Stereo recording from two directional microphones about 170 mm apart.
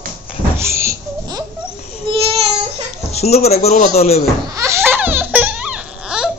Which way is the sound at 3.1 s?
40° left (ahead or behind).